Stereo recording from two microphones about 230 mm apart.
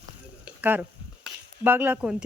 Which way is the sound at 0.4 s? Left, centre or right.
Centre.